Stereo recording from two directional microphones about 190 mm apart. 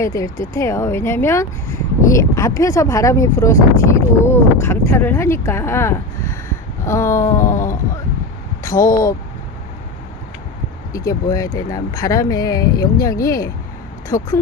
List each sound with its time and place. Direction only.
0.0 s speech: 15° left (ahead or behind)
8.6 s speech: 15° left (ahead or behind)
10.9 s speech: 20° left (ahead or behind)